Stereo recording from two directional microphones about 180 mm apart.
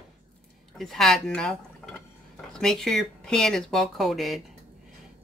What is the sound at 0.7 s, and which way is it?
Speech, centre (ahead or behind).